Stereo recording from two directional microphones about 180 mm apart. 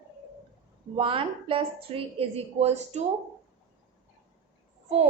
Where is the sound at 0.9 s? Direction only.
30° right (ahead or behind).